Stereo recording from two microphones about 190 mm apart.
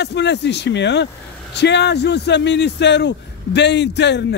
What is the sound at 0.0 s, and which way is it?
Speech, 65° left (ahead or behind).